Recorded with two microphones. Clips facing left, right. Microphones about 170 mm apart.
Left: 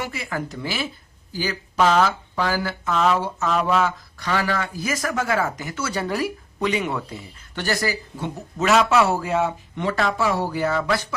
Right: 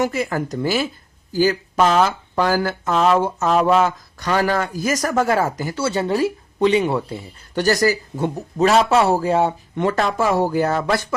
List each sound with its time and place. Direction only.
0.0 s speech: 45° right (ahead or behind)
9.7 s speech: 45° right (ahead or behind)